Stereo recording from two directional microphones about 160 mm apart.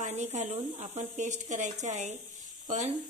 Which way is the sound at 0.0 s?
45° right (ahead or behind).